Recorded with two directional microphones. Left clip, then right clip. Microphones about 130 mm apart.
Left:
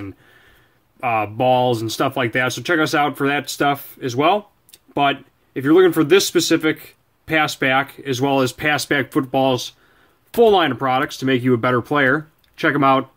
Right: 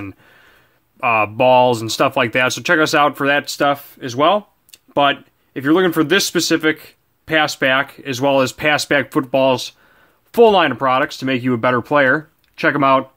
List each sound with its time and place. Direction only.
0.9 s speech: 40° right (ahead or behind)